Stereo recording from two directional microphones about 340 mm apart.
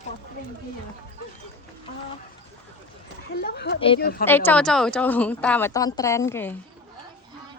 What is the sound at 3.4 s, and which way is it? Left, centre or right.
Speech, left.